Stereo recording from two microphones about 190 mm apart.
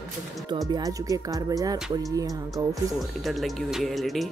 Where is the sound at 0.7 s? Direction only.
20° right (ahead or behind).